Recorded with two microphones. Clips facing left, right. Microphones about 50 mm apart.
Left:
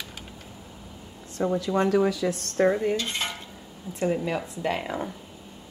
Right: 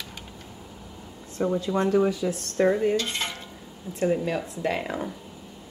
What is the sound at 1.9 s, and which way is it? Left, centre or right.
Speech, left.